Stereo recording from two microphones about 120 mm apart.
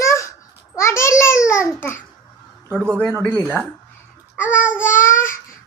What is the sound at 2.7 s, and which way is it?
Speech, 20° right (ahead or behind).